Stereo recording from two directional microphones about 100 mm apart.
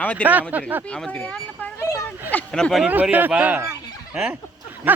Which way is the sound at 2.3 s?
10° left (ahead or behind).